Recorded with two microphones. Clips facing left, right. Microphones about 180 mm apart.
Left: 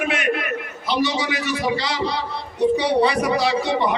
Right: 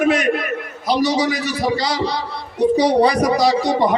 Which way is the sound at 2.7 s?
40° right (ahead or behind).